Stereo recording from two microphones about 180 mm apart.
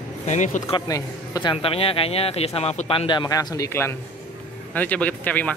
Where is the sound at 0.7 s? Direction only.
20° left (ahead or behind).